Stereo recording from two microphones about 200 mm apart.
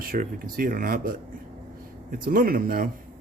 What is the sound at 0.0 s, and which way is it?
Speech, 45° right (ahead or behind).